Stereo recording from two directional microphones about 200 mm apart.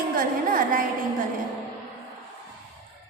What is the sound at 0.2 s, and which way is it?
Speech, 45° right (ahead or behind).